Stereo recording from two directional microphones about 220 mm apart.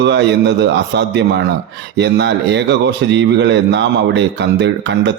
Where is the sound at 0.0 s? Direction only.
50° right (ahead or behind).